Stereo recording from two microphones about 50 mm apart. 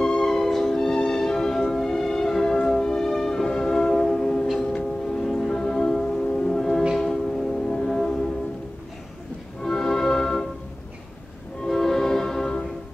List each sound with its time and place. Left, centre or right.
0.0 s music: centre
9.6 s music: centre
11.6 s music: centre